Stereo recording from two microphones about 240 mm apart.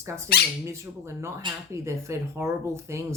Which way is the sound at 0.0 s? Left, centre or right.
Centre.